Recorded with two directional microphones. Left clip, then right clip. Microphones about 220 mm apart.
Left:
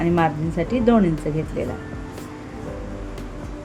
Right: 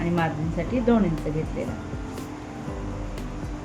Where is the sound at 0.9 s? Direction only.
45° left (ahead or behind).